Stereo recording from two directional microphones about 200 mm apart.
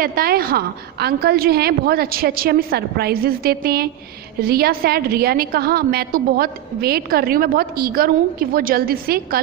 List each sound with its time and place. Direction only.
0.0 s a woman's voice: 50° right (ahead or behind)